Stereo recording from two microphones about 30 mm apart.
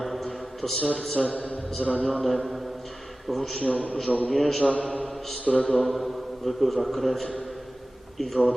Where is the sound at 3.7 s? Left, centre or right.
Left.